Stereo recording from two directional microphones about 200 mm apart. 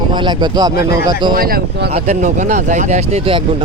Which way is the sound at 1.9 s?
35° right (ahead or behind).